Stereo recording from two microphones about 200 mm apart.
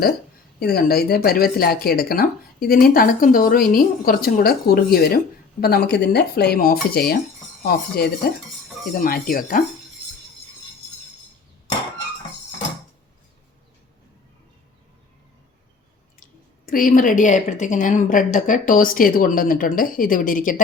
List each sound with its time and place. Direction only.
0.6 s speech: 50° left (ahead or behind)
16.2 s speech: 45° left (ahead or behind)